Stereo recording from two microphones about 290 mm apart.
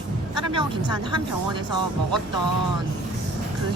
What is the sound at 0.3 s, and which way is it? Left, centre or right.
Speech, centre.